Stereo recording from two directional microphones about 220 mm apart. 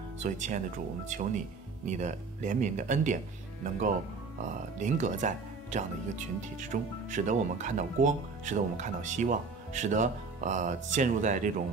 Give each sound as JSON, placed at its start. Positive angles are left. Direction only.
{"t": 0.2, "sound": "speech", "side_deg": -35}
{"t": 4.7, "sound": "speech", "side_deg": -35}